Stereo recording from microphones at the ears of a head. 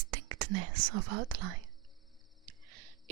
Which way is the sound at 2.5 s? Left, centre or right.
Right.